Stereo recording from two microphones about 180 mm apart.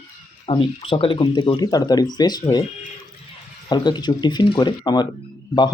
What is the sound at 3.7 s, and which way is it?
Speech, 25° left (ahead or behind).